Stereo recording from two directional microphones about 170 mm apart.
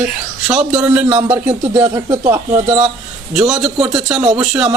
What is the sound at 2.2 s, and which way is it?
A man's voice, 15° right (ahead or behind).